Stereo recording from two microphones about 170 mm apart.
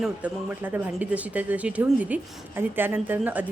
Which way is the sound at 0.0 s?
10° right (ahead or behind).